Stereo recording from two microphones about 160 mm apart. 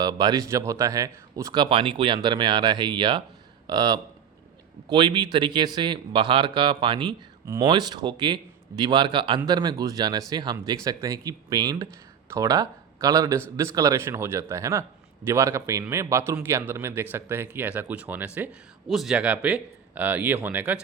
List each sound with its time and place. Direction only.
0.0 s a man's voice: 25° right (ahead or behind)